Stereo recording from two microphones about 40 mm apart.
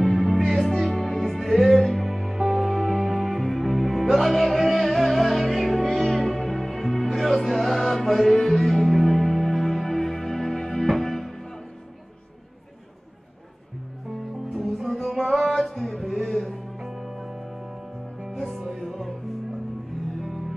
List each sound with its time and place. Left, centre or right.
0.0 s music: centre
14.5 s music: centre
20.2 s music: centre